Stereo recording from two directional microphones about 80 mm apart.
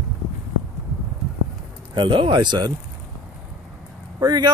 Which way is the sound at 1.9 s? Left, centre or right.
Right.